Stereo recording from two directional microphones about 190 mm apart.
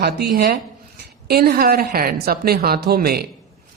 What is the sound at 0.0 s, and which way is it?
A man's voice, 55° right (ahead or behind).